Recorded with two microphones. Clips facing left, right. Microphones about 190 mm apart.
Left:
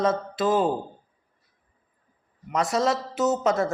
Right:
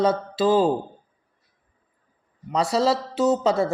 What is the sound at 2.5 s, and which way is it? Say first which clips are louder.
Speech: right 3 dB; 30° right (ahead or behind).